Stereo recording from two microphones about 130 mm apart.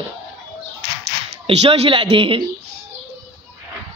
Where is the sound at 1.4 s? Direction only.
50° right (ahead or behind).